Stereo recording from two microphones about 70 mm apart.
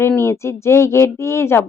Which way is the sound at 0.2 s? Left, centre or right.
Left.